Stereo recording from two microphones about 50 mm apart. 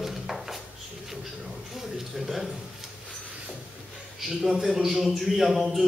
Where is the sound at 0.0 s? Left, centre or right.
Centre.